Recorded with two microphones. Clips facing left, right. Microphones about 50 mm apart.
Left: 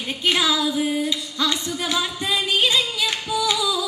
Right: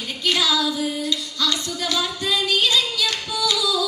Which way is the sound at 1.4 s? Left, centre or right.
Left.